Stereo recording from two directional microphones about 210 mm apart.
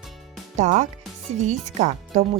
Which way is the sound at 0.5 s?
35° right (ahead or behind).